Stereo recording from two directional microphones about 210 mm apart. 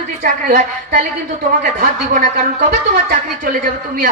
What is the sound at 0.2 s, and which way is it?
A man's voice, 40° right (ahead or behind).